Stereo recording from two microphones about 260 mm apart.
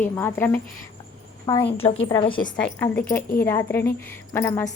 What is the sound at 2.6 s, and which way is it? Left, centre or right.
A woman's voice, centre.